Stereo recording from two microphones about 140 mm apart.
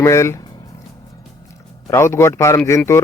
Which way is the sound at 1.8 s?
20° left (ahead or behind).